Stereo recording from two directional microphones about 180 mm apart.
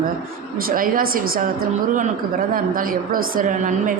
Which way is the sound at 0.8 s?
50° right (ahead or behind).